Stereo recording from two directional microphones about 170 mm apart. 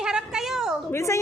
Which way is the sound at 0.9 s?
15° left (ahead or behind).